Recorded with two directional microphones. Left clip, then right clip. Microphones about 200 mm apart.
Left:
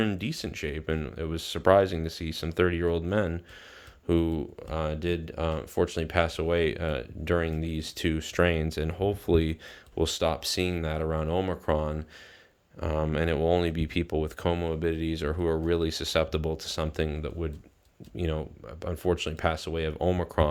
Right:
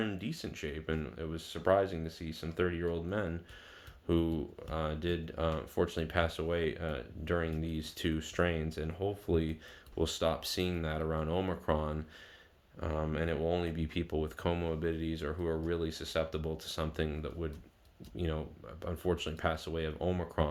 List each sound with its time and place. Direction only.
0.0 s speech: 55° left (ahead or behind)
4.0 s speech: 40° left (ahead or behind)
10.0 s speech: 40° left (ahead or behind)